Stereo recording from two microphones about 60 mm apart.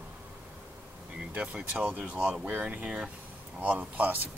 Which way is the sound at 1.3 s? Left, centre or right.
Centre.